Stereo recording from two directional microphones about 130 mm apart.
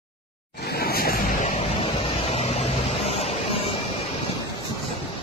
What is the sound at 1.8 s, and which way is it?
Vehicle, 50° left (ahead or behind).